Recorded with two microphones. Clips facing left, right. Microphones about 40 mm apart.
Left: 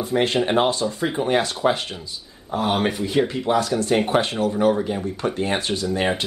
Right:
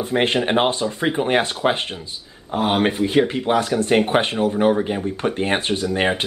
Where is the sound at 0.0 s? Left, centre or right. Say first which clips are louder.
Right 1 dB; right.